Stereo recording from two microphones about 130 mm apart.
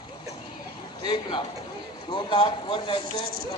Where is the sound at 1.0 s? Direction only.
35° left (ahead or behind).